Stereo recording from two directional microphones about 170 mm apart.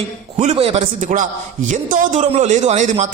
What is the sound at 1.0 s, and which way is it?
A man's voice, 50° right (ahead or behind).